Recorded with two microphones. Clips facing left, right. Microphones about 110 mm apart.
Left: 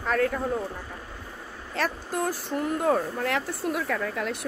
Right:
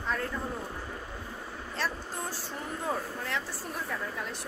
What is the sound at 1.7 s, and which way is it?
Speech, 80° left.